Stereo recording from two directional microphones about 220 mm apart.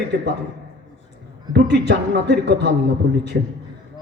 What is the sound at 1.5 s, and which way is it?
A man's voice, 50° right (ahead or behind).